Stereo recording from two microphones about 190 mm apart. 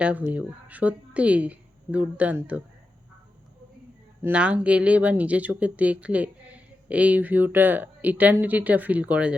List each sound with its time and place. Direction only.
0.0 s speech: 5° right (ahead or behind)
4.2 s speech: 5° right (ahead or behind)